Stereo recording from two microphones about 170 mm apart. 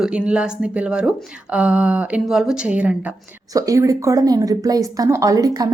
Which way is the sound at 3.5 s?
20° right (ahead or behind).